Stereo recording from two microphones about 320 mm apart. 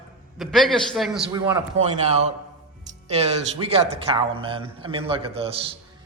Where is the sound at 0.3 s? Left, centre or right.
Centre.